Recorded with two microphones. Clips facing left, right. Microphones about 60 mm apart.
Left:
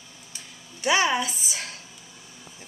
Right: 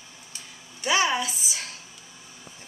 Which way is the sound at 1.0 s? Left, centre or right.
Centre.